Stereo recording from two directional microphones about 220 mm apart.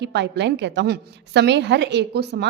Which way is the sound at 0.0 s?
50° right (ahead or behind).